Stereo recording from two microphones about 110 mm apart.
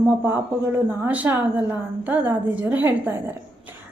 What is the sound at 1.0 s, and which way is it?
Speech, 15° right (ahead or behind).